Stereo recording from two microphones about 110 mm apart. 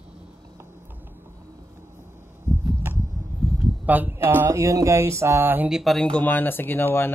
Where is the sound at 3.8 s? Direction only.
15° right (ahead or behind).